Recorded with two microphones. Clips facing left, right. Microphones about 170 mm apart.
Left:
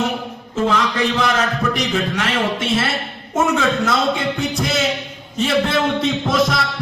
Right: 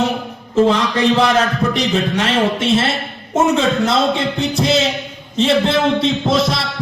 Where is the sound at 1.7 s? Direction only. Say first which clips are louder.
Right 3 dB; 25° right (ahead or behind).